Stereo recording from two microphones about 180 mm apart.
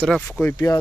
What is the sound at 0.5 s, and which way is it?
Speech, 20° left (ahead or behind).